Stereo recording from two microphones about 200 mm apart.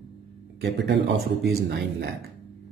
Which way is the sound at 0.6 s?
55° right (ahead or behind).